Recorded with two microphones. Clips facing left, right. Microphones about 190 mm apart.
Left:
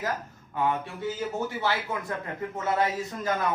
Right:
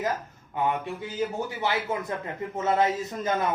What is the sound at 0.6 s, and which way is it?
Speech, 20° right (ahead or behind).